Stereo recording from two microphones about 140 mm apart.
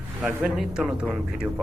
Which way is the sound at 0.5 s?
Centre (ahead or behind).